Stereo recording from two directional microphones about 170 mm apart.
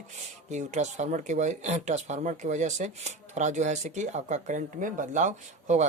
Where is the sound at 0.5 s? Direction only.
45° right (ahead or behind).